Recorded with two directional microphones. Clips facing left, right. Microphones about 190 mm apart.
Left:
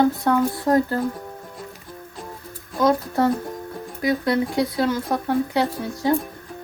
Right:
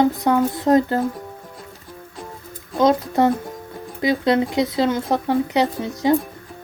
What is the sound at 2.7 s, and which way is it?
Speech, 20° right (ahead or behind).